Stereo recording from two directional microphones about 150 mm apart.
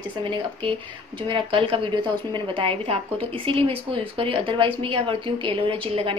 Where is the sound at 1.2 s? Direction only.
35° right (ahead or behind).